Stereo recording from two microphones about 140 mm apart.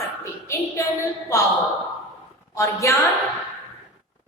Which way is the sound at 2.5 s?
20° left (ahead or behind).